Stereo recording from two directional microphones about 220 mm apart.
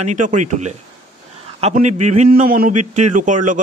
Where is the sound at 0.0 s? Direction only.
35° right (ahead or behind).